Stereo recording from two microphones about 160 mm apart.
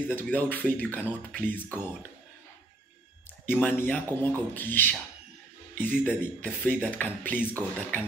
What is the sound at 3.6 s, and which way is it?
Speech, 10° left (ahead or behind).